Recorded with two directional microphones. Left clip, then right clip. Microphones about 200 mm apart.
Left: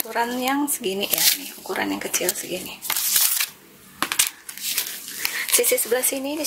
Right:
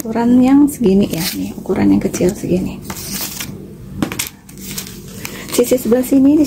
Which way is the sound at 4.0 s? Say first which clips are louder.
Right 1 dB; 25° left (ahead or behind).